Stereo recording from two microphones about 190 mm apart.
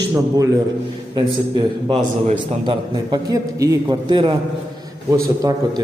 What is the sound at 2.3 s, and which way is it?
Speech, 35° right (ahead or behind).